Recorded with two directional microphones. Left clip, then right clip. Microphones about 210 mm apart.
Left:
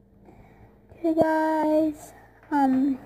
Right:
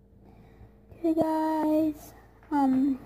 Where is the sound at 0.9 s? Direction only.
Centre (ahead or behind).